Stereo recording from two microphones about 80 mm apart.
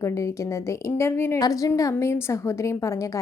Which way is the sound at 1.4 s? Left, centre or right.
Left.